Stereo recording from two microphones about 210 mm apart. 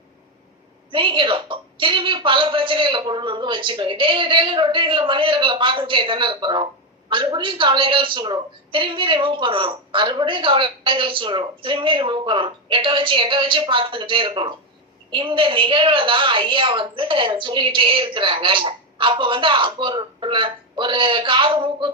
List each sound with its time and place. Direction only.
0.9 s a woman's voice: 25° right (ahead or behind)